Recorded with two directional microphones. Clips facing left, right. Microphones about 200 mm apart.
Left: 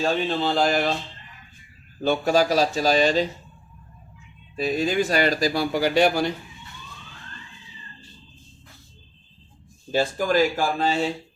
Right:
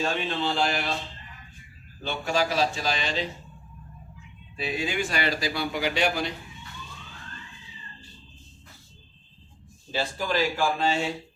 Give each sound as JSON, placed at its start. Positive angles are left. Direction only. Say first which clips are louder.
{"t": 0.0, "sound": "speech", "louder": "left 5 dB", "side_deg": 40}
{"t": 2.0, "sound": "speech", "louder": "left 7 dB", "side_deg": 40}
{"t": 4.5, "sound": "speech", "louder": "left 7 dB", "side_deg": 40}
{"t": 9.9, "sound": "speech", "louder": "left 6 dB", "side_deg": 45}